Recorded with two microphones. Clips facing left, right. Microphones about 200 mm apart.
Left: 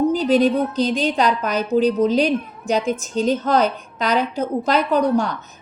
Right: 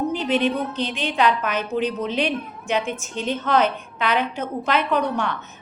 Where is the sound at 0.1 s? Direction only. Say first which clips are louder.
Left 5 dB; 35° left (ahead or behind).